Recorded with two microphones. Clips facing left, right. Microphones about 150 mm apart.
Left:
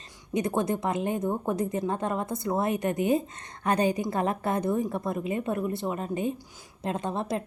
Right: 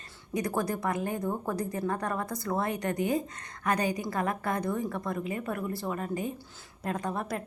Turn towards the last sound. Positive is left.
turn(degrees=25)  # may be behind; listen again after turning